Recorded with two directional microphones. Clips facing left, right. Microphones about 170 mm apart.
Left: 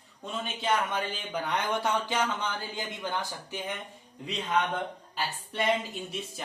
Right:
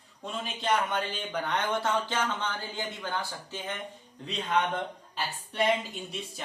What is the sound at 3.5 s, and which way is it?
Speech, 15° left (ahead or behind).